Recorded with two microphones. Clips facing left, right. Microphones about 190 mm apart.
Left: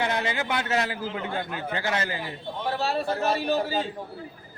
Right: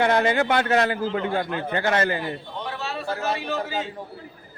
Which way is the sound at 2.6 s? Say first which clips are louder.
Left 4 dB; 35° left (ahead or behind).